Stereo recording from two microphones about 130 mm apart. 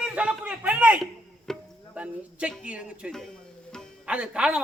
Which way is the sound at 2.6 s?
10° right (ahead or behind).